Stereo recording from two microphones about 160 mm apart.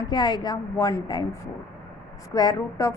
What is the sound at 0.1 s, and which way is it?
A woman's voice, 25° left (ahead or behind).